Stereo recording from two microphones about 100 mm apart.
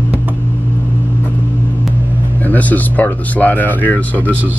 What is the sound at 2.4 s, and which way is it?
Speech, 15° left (ahead or behind).